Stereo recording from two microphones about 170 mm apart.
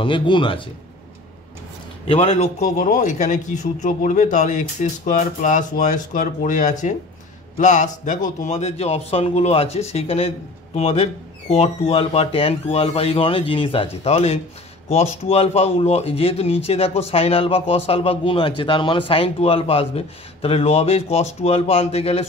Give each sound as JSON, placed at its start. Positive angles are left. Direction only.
{"t": 0.0, "sound": "speech", "side_deg": 30}
{"t": 2.0, "sound": "speech", "side_deg": 35}